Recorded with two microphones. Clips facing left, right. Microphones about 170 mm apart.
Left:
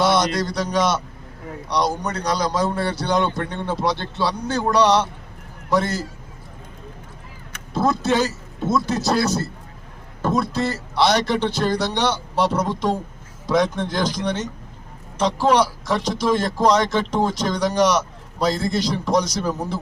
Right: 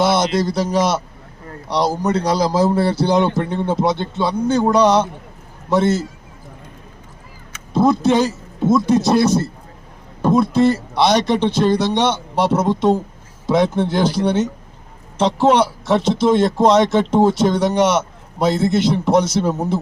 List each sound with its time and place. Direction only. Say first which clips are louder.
0.0 s speech: right 3 dB; 25° right (ahead or behind)
7.7 s a sound: right 6 dB; 20° right (ahead or behind)
8.9 s speech: right 6 dB; 20° right (ahead or behind)
10.4 s speech: right 9 dB; 20° right (ahead or behind)